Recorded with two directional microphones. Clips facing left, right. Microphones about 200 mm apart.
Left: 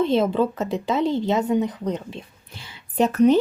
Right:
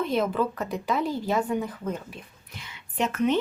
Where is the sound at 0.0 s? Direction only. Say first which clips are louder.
Left 6 dB; 25° left (ahead or behind).